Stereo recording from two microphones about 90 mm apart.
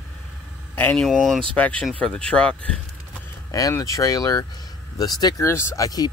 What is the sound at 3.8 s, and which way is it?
Speech, 40° left (ahead or behind).